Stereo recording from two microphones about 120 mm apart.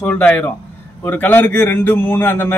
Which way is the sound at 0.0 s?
15° left (ahead or behind).